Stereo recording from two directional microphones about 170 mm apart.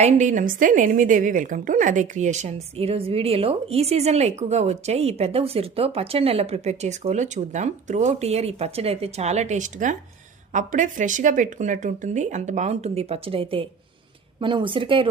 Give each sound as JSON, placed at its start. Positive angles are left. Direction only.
{"t": 0.0, "sound": "a woman's voice", "side_deg": -45}